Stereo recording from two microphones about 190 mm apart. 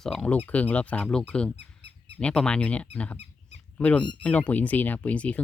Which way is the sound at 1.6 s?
65° right (ahead or behind).